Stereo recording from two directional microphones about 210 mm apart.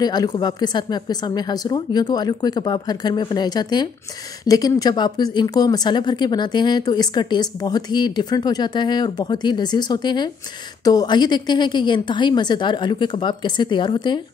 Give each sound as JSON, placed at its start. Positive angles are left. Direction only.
{"t": 0.0, "sound": "speech", "side_deg": 20}